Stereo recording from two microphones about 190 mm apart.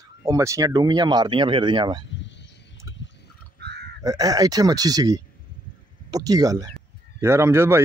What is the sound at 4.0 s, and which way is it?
Speech, 20° right (ahead or behind).